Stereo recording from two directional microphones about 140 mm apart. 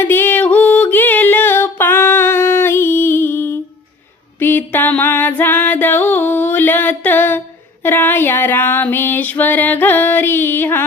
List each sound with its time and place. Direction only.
0.0 s music: 15° left (ahead or behind)